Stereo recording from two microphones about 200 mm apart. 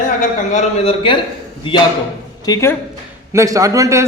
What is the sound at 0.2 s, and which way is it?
A man's voice, 40° left (ahead or behind).